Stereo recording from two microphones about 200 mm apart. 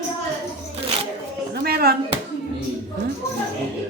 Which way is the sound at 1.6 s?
50° right (ahead or behind).